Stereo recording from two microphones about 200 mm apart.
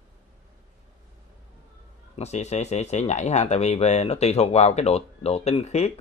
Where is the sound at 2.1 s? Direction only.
35° left (ahead or behind).